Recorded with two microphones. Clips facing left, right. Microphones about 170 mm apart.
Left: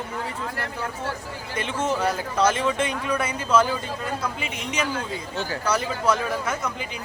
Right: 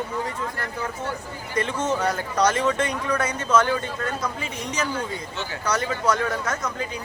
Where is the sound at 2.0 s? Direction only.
5° left (ahead or behind).